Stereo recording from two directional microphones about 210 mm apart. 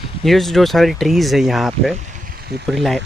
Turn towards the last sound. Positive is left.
turn(degrees=0)  # may be behind; listen again after turning